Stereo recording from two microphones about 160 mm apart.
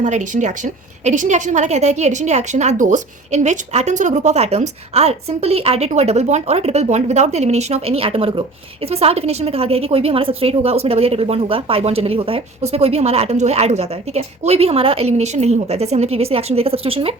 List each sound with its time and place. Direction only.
0.0 s a woman's voice: 50° right (ahead or behind)